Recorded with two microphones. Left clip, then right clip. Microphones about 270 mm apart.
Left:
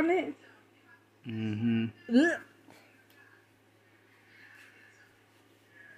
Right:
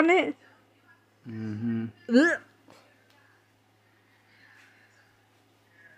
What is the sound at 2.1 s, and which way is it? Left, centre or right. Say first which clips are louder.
Music: right 5 dB; right.